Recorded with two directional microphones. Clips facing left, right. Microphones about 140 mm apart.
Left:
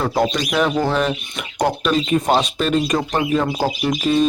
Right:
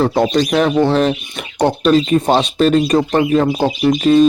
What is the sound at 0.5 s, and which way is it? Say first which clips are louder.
Speech: right 4 dB; 35° right (ahead or behind).